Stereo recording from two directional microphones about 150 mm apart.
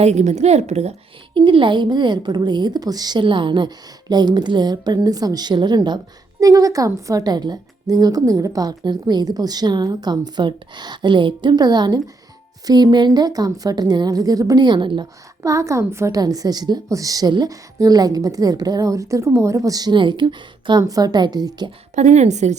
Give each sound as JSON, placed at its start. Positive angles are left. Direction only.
{"t": 0.0, "sound": "a woman's voice", "side_deg": -50}
{"t": 1.4, "sound": "a woman's voice", "side_deg": -35}
{"t": 15.4, "sound": "a woman's voice", "side_deg": -20}
{"t": 21.9, "sound": "a woman's voice", "side_deg": -50}